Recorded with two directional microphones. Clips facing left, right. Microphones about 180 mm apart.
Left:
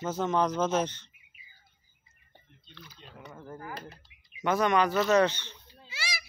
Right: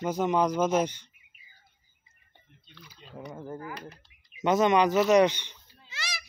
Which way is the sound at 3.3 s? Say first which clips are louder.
Right 2 dB; 25° right (ahead or behind).